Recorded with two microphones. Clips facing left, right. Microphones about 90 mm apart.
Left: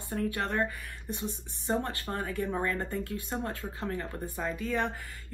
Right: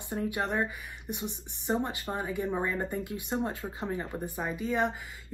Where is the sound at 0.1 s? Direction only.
15° right (ahead or behind).